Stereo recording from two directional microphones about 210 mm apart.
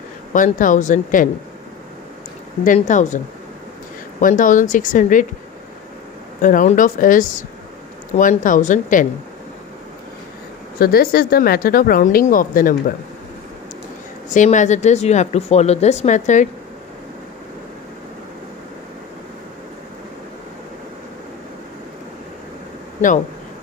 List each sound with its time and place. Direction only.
0.3 s speech: 40° left (ahead or behind)
2.6 s speech: 35° left (ahead or behind)
4.2 s speech: 40° left (ahead or behind)
6.4 s speech: 40° left (ahead or behind)
10.8 s speech: 45° left (ahead or behind)
14.3 s speech: 35° left (ahead or behind)